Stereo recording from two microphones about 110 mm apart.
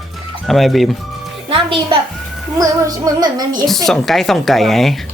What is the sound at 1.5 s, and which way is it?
Speech, 50° right (ahead or behind).